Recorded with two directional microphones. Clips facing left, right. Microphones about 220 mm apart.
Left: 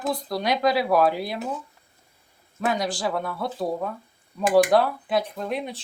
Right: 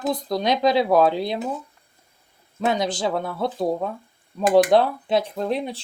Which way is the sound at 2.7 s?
20° right (ahead or behind).